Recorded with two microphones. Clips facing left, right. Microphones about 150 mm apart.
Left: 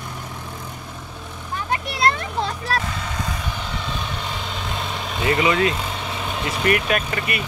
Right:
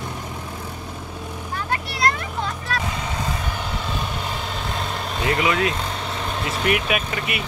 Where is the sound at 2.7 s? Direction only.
35° left (ahead or behind).